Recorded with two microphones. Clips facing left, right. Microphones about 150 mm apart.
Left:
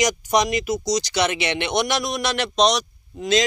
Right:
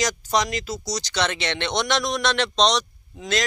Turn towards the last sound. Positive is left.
turn(degrees=10)  # may be behind; listen again after turning